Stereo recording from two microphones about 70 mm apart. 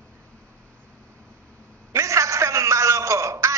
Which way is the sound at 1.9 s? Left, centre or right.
Right.